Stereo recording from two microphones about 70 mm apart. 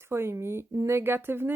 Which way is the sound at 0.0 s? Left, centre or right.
Right.